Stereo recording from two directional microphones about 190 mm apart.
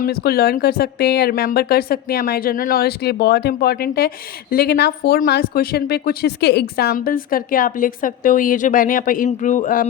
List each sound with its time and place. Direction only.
0.0 s speech: 55° left (ahead or behind)